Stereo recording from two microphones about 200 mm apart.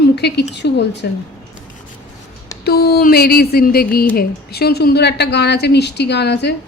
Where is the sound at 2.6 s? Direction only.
50° left (ahead or behind).